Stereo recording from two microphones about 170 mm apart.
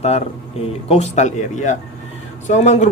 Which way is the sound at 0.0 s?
35° left (ahead or behind).